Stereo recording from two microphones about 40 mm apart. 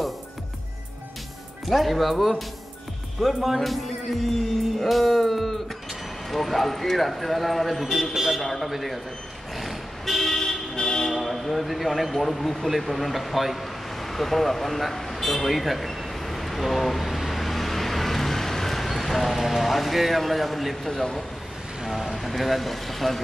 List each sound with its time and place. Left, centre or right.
1.7 s speech: centre
8.4 s speech: centre
9.6 s vehicle: centre
11.1 s a sound: centre
20.9 s a man's voice: centre
21.8 s speech: centre